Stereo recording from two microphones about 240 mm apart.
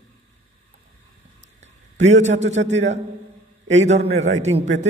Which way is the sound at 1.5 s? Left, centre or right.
Right.